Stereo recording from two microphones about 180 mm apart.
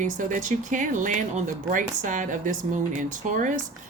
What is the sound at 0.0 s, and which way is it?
Speech, 45° right (ahead or behind).